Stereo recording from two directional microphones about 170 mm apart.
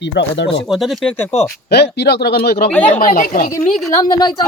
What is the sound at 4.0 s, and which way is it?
Speech, 25° left (ahead or behind).